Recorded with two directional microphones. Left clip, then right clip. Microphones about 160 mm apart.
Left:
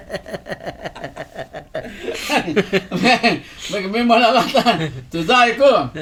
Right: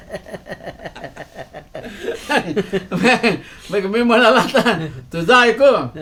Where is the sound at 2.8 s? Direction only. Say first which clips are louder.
Right 2 dB; 15° right (ahead or behind).